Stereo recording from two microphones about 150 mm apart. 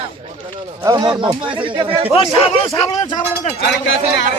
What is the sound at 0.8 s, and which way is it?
Speech, 25° right (ahead or behind).